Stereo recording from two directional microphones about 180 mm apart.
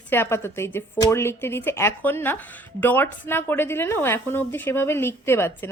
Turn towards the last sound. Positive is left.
turn(degrees=15)  # may be behind; listen again after turning